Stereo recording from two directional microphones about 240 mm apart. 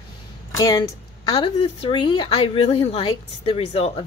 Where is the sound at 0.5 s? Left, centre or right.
Centre.